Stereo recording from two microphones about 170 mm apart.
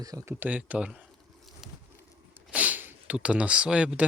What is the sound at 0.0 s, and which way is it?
Speech, 20° right (ahead or behind).